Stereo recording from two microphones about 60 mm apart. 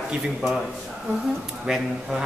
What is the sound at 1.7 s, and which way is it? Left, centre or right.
Speech, centre.